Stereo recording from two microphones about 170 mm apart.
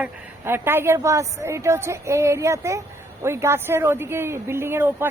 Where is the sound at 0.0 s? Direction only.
15° right (ahead or behind).